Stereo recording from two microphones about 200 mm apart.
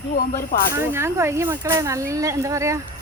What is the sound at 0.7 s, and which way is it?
Speech, 15° right (ahead or behind).